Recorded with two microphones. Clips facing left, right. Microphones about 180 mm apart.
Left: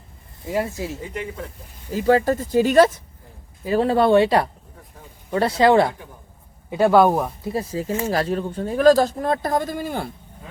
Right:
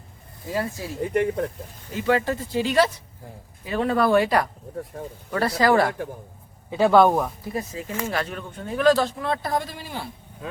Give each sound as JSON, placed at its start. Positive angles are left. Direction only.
{"t": 0.4, "sound": "speech", "side_deg": 20}
{"t": 1.1, "sound": "speech", "side_deg": -55}
{"t": 1.9, "sound": "speech", "side_deg": 40}
{"t": 3.6, "sound": "speech", "side_deg": 35}
{"t": 4.9, "sound": "speech", "side_deg": -70}
{"t": 5.3, "sound": "speech", "side_deg": 25}
{"t": 6.7, "sound": "speech", "side_deg": 5}
{"t": 7.4, "sound": "speech", "side_deg": 30}
{"t": 10.4, "sound": "speech", "side_deg": -75}